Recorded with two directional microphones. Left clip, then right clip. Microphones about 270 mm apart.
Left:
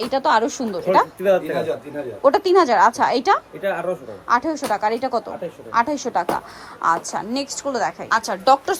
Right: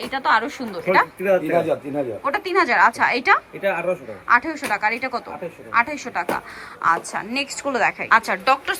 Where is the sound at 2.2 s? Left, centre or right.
Left.